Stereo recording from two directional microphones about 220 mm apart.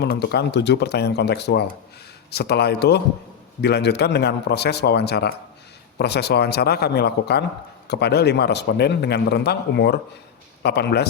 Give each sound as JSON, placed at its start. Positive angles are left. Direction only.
{"t": 0.0, "sound": "a man's voice", "side_deg": 50}